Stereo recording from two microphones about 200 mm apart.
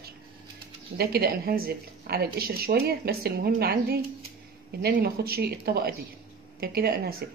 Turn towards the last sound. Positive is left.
turn(degrees=-50)  # may be behind; listen again after turning